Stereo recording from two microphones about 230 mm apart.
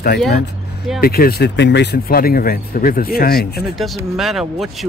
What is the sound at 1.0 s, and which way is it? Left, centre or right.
Speech, left.